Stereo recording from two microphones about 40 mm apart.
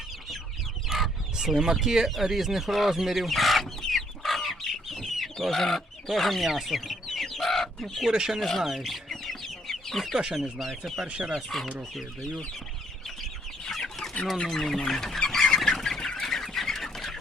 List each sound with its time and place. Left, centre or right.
0.9 s fowl: centre
1.5 s speech: centre
3.8 s chicken: centre
8.1 s speech: centre
8.4 s speech: centre
9.0 s chicken: centre
10.3 s speech: centre
13.8 s chicken: centre
14.4 s speech: centre
15.3 s chicken: centre